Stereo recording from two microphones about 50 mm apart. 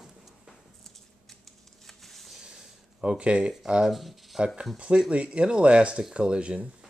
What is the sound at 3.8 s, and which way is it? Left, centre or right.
Speech, centre.